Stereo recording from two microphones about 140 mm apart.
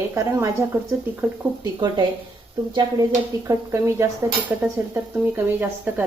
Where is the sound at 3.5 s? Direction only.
20° right (ahead or behind).